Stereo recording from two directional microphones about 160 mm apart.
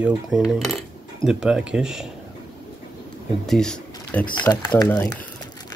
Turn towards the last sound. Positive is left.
turn(degrees=25)  # may be behind; listen again after turning